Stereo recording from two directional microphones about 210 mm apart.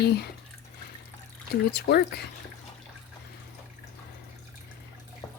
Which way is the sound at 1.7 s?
50° left (ahead or behind).